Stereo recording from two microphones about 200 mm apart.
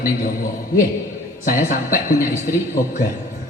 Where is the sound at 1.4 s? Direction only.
40° left (ahead or behind).